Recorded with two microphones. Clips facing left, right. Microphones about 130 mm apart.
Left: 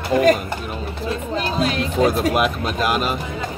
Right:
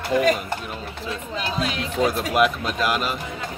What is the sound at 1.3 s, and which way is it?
Speech, 40° left (ahead or behind).